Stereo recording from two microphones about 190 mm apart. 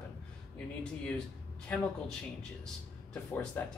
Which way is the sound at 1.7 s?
10° left (ahead or behind).